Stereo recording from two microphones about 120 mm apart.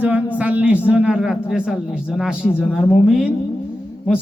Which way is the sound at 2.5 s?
20° left (ahead or behind).